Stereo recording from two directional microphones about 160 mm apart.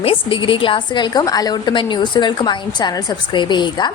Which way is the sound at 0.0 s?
35° left (ahead or behind).